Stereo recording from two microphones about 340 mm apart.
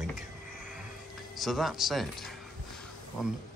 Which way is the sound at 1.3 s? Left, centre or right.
Centre.